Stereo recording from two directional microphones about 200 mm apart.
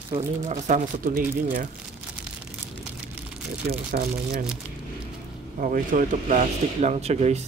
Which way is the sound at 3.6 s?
50° right (ahead or behind).